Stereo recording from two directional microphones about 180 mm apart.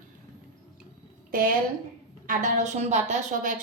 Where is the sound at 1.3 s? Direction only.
50° right (ahead or behind).